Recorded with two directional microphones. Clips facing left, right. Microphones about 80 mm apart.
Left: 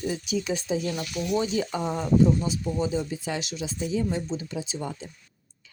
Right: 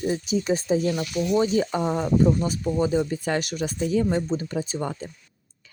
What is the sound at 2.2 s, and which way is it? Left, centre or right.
Speech, right.